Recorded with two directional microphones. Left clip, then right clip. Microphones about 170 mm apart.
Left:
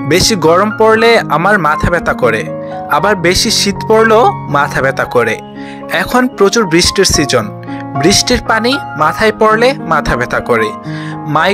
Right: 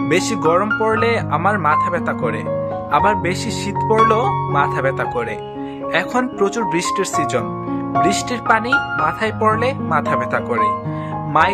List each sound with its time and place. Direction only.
0.1 s speech: 30° left (ahead or behind)